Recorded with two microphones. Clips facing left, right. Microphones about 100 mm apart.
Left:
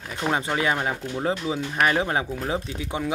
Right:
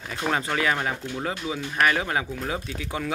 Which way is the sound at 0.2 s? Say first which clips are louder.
Left 1 dB; 20° left (ahead or behind).